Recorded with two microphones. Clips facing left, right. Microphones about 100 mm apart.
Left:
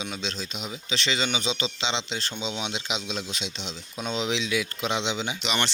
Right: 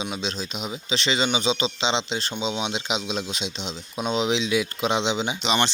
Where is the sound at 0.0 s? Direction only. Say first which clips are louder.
Right 4 dB; 15° right (ahead or behind).